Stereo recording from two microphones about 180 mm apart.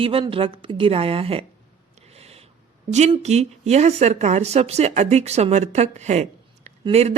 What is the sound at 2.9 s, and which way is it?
Speech, 40° right (ahead or behind).